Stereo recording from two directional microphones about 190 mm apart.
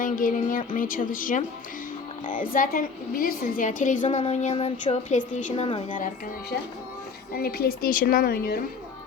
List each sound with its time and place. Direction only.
0.0 s a woman's voice: 45° left (ahead or behind)
7.3 s a woman's voice: 55° left (ahead or behind)